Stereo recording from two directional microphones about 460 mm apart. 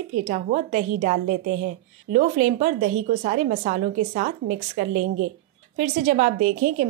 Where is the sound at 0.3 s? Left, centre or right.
Centre.